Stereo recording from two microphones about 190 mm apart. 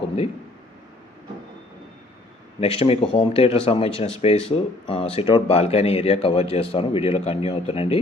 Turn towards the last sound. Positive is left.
turn(degrees=30)  # may be behind; listen again after turning